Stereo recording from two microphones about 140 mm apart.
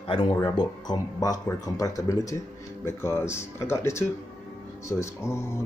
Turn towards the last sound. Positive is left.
turn(degrees=20)  # may be behind; listen again after turning